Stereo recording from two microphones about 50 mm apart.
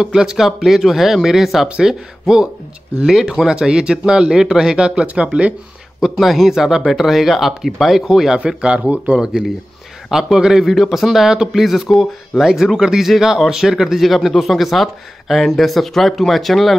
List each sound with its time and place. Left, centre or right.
0.0 s speech: centre
6.0 s speech: centre
8.5 s a man's voice: centre